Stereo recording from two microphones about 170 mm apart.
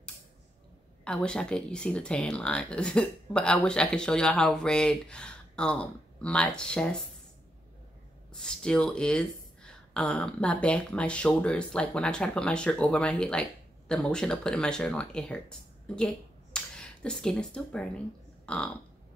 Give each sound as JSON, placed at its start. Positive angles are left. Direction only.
{"t": 1.0, "sound": "speech", "side_deg": 5}
{"t": 8.3, "sound": "speech", "side_deg": 5}